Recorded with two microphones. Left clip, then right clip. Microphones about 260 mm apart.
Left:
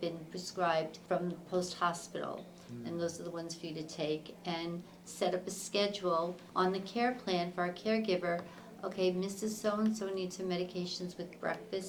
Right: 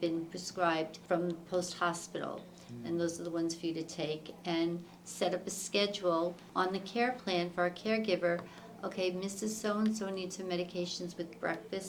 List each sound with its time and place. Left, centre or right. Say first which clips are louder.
0.0 s speech: right 4 dB; right